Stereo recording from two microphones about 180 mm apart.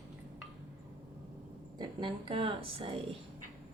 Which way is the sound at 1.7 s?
25° right (ahead or behind).